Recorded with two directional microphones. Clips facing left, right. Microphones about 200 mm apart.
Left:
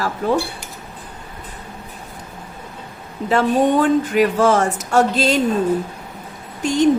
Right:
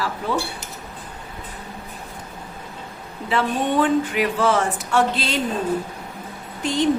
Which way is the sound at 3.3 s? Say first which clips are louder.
Left 6 dB; 45° left (ahead or behind).